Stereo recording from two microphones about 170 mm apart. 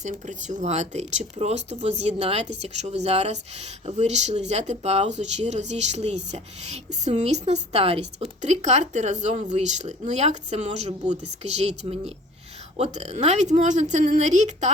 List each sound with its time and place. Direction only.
0.0 s a woman's voice: 45° right (ahead or behind)